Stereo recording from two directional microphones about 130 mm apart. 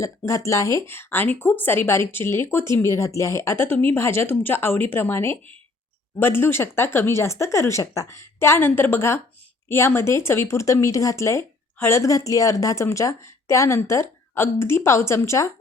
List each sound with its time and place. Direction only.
0.3 s speech: 25° left (ahead or behind)